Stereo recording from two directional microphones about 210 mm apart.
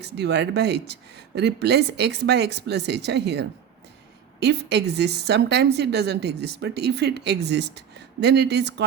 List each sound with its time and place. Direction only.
0.0 s speech: 55° right (ahead or behind)